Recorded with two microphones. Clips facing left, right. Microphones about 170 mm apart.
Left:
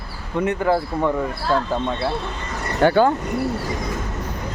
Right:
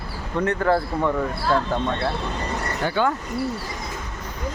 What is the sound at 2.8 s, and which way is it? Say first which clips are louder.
Speech: left 12 dB; 70° left (ahead or behind).